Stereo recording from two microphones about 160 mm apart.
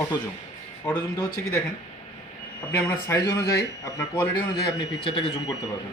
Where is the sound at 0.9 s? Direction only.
20° left (ahead or behind).